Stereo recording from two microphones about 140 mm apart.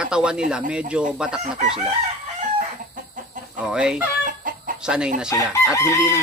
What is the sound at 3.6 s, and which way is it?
Speech, 5° right (ahead or behind).